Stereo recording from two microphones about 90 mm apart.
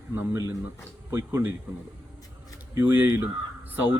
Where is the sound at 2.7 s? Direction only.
20° right (ahead or behind).